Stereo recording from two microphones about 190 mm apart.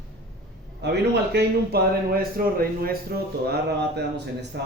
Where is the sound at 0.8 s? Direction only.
65° right (ahead or behind).